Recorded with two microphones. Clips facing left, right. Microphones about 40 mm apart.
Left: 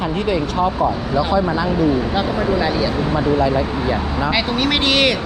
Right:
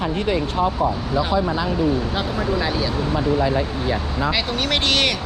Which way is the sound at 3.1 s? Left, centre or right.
Left.